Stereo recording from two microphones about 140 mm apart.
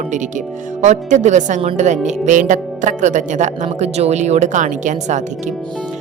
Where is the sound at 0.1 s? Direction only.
60° right (ahead or behind).